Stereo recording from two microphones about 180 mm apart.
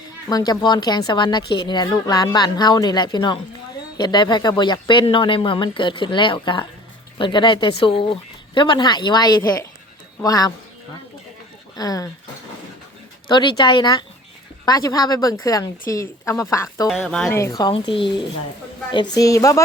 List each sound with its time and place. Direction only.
0.3 s speech: 20° left (ahead or behind)
11.8 s speech: 20° left (ahead or behind)
13.2 s a woman's voice: 25° left (ahead or behind)
16.9 s speech: centre (ahead or behind)
17.3 s speech: 20° left (ahead or behind)
19.1 s speech: 20° left (ahead or behind)